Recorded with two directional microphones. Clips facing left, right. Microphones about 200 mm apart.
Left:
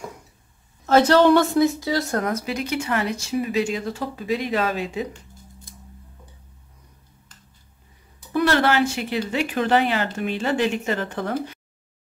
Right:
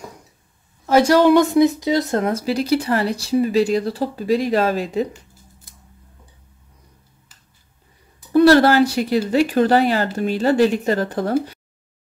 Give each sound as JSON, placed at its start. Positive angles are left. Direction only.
{"t": 0.8, "sound": "a woman's voice", "side_deg": -10}
{"t": 8.3, "sound": "speech", "side_deg": -35}